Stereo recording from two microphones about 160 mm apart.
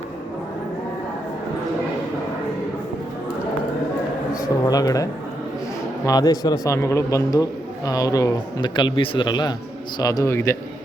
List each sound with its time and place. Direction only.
4.4 s speech: 20° left (ahead or behind)
6.1 s a man's voice: 25° left (ahead or behind)